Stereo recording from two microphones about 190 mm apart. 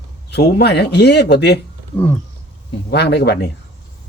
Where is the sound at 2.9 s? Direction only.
60° left (ahead or behind).